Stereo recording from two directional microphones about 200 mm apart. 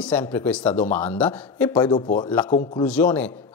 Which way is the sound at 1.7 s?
20° left (ahead or behind).